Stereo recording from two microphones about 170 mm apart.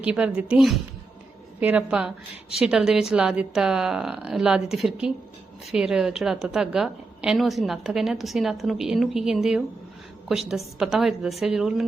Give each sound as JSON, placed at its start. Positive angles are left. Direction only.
{"t": 0.0, "sound": "a woman's voice", "side_deg": -5}